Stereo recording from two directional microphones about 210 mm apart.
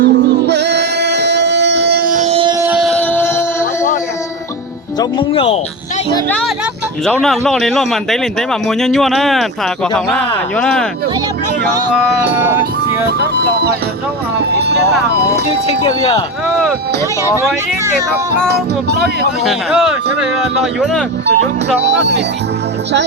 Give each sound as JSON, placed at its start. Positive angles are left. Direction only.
{"t": 0.0, "sound": "music", "side_deg": -55}
{"t": 2.6, "sound": "music", "side_deg": 0}
{"t": 4.9, "sound": "speech", "side_deg": 25}
{"t": 7.0, "sound": "speech", "side_deg": 0}
{"t": 12.0, "sound": "speech", "side_deg": -10}
{"t": 18.5, "sound": "speech", "side_deg": -50}
{"t": 19.5, "sound": "speech", "side_deg": -5}
{"t": 21.8, "sound": "speech", "side_deg": -55}